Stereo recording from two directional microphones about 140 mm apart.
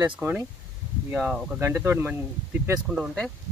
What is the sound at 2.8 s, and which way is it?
Speech, centre (ahead or behind).